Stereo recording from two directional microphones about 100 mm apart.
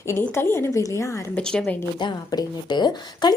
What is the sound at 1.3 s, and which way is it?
Speech, 10° left (ahead or behind).